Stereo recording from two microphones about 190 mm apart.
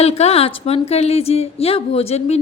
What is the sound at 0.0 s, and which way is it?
Speech, 35° left (ahead or behind).